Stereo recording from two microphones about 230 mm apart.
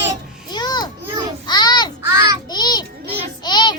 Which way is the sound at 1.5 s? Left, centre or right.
Centre.